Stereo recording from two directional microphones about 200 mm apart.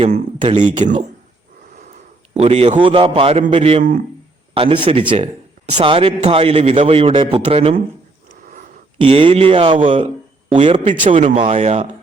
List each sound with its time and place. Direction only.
0.0 s speech: 35° right (ahead or behind)
2.3 s a man's voice: 30° right (ahead or behind)
9.0 s a man's voice: 25° right (ahead or behind)